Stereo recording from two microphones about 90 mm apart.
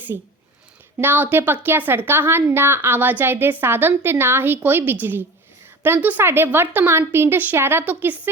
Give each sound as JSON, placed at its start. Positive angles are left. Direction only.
{"t": 0.1, "sound": "a woman's voice", "side_deg": -30}